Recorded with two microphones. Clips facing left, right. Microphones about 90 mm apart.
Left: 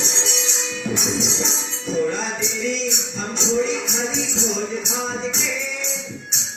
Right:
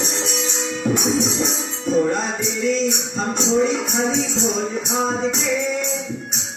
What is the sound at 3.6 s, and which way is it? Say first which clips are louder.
Music: right 3 dB; 45° right (ahead or behind).